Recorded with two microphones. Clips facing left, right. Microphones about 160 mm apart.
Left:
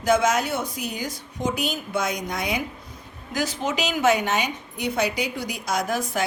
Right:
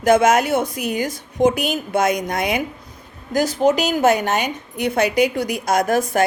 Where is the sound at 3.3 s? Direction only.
40° right (ahead or behind).